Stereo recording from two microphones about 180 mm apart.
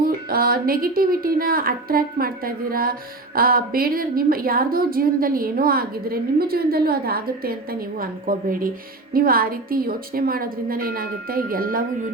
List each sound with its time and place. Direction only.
0.0 s a woman's voice: 55° right (ahead or behind)